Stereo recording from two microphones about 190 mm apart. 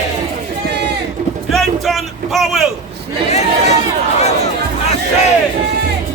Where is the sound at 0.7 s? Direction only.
60° right (ahead or behind).